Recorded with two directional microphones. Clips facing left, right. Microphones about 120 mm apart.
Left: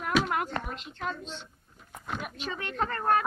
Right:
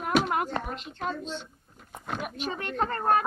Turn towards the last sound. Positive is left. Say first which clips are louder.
# right 2 dB
turn(degrees=-30)  # may be behind; listen again after turning